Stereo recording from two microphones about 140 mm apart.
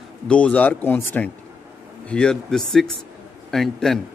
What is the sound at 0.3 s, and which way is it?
A man's voice, 10° left (ahead or behind).